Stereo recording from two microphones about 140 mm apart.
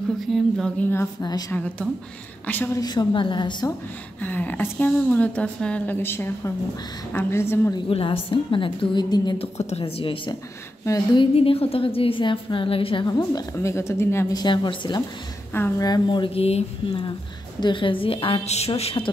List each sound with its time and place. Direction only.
0.3 s speech: 5° left (ahead or behind)
2.8 s a woman's voice: 30° left (ahead or behind)
4.2 s speech: 10° left (ahead or behind)
7.9 s a woman's voice: 40° left (ahead or behind)
9.4 s a woman's voice: 50° left (ahead or behind); by 14.4 s 20° left (ahead or behind)
14.4 s a woman's voice: 35° left (ahead or behind)